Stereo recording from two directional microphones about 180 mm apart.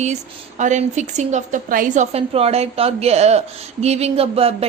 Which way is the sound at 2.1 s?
35° right (ahead or behind).